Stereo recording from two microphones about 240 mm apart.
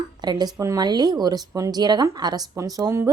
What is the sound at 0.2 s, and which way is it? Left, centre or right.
Speech, centre.